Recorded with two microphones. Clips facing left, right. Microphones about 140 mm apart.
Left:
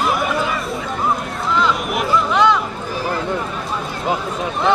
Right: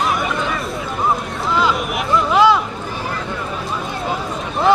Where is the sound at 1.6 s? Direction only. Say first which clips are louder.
Even; 5° right (ahead or behind).